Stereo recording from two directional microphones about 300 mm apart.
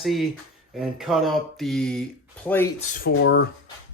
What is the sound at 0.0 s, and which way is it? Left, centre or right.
Speech, centre.